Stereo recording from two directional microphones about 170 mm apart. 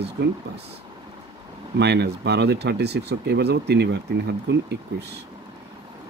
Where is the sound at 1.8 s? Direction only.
75° right (ahead or behind).